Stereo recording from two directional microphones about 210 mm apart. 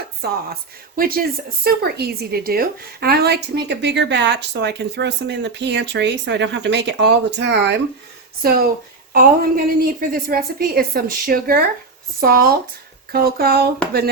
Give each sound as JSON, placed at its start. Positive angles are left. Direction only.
{"t": 0.2, "sound": "a woman's voice", "side_deg": -45}